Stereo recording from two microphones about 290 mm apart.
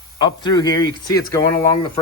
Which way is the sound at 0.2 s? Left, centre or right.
Centre.